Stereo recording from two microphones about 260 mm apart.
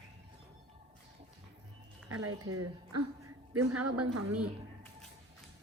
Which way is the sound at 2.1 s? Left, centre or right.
Right.